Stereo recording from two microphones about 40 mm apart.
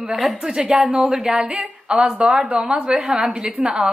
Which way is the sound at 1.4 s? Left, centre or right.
Right.